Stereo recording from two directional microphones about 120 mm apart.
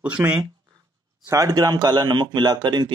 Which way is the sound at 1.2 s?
30° right (ahead or behind).